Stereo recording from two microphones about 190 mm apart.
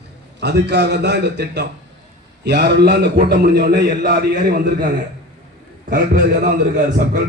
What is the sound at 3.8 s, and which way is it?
A man's voice, 55° right (ahead or behind).